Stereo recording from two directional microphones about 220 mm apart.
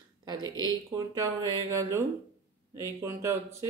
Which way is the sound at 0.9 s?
15° right (ahead or behind).